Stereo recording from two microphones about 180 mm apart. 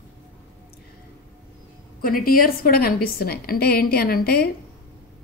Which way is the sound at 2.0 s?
55° left (ahead or behind).